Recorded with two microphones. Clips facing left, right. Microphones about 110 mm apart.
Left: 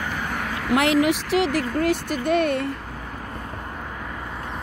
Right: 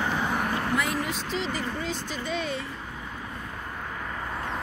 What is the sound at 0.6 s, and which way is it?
Speech, 80° left.